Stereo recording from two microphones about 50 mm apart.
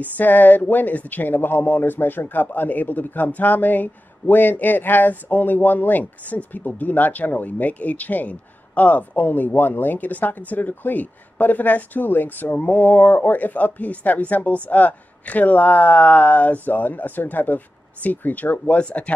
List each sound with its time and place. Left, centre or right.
0.0 s speech: left